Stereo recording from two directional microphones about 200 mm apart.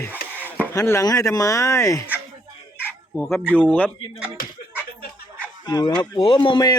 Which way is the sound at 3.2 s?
10° left (ahead or behind).